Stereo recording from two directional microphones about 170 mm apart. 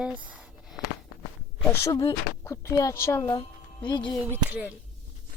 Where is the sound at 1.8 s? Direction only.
20° left (ahead or behind).